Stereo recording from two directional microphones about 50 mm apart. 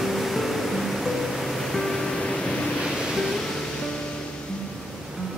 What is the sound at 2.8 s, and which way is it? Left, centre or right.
Waves, centre.